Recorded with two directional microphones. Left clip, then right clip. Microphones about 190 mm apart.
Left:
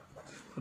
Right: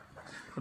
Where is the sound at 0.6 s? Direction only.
25° right (ahead or behind).